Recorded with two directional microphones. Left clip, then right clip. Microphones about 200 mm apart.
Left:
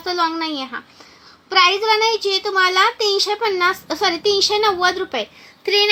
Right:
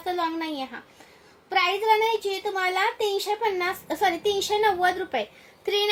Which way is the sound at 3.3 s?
10° right (ahead or behind).